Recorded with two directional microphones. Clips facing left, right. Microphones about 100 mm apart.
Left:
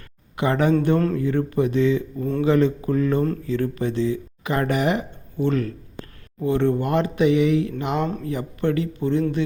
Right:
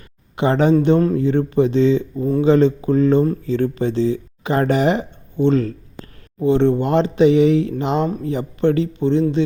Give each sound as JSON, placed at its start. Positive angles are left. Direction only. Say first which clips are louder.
{"t": 0.3, "sound": "speech", "louder": "right 4 dB", "side_deg": -25}